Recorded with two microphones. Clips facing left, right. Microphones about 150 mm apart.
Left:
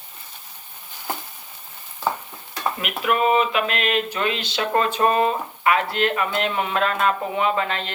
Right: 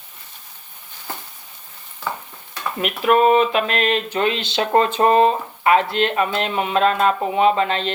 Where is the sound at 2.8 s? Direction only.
35° right (ahead or behind).